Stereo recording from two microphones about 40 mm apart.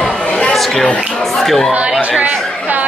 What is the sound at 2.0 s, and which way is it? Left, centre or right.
Chatter, right.